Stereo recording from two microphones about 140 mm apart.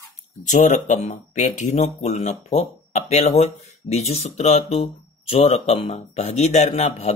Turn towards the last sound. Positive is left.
turn(degrees=50)  # may be behind; listen again after turning